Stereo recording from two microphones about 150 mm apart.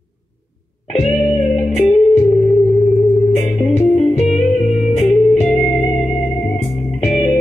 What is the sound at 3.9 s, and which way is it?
Music, 45° left (ahead or behind).